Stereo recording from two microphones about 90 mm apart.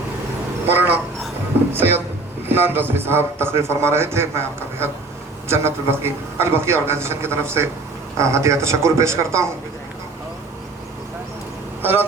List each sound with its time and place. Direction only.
0.7 s a woman's voice: 20° right (ahead or behind)
11.8 s speech: 25° right (ahead or behind)